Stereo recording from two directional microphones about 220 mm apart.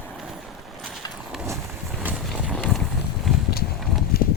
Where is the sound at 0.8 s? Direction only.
Centre (ahead or behind).